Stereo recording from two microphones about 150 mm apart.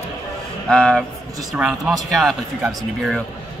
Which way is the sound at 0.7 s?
5° left (ahead or behind).